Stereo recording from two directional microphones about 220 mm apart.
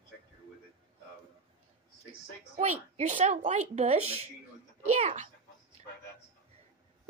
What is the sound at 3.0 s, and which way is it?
Speech, 35° right (ahead or behind).